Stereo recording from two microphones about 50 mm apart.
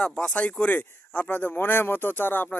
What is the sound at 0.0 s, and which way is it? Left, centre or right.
Speech, centre.